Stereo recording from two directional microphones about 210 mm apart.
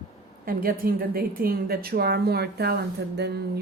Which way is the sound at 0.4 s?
45° right (ahead or behind).